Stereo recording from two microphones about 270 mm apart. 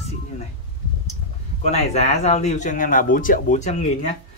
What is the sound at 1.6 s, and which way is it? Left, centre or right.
Speech, left.